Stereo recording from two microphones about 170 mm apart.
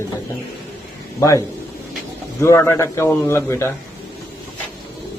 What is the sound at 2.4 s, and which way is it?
A man's voice, 15° left (ahead or behind).